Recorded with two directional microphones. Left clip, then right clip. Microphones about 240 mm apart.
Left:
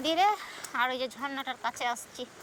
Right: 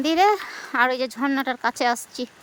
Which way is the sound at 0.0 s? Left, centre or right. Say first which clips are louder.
Right 7 dB; centre.